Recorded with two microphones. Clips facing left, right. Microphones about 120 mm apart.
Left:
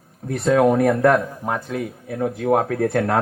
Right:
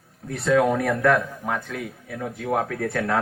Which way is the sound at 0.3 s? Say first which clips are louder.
Left 2 dB; 45° left (ahead or behind).